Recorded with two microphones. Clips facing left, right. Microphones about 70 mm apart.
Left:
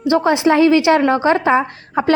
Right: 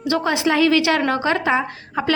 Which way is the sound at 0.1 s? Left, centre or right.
Left.